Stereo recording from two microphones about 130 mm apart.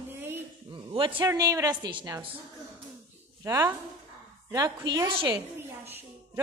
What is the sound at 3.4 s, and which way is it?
Speech, 20° right (ahead or behind).